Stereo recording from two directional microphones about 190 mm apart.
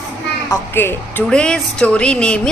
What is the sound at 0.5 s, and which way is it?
A woman's voice, 10° left (ahead or behind).